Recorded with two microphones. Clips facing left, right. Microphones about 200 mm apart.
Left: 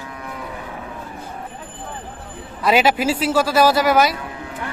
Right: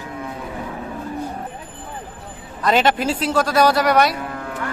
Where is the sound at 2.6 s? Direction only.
5° left (ahead or behind).